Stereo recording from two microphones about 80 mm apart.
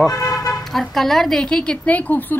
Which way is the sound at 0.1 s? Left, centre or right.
Left.